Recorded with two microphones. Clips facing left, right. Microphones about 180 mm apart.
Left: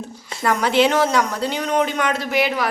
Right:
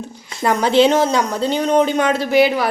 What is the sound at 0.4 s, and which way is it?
A woman's voice, 25° right (ahead or behind).